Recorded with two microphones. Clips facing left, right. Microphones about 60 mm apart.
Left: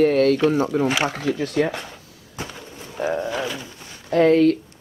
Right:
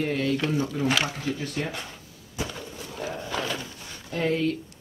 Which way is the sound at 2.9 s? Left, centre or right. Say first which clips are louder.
Left 10 dB; left.